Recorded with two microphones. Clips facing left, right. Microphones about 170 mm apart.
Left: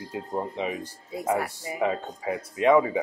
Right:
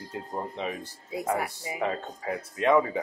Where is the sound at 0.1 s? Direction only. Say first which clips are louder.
Left 4 dB; 10° left (ahead or behind).